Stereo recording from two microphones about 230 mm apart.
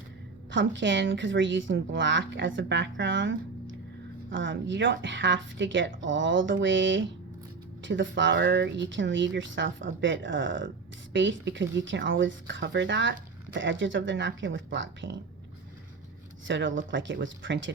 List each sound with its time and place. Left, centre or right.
0.5 s a woman's voice: right
16.5 s a woman's voice: right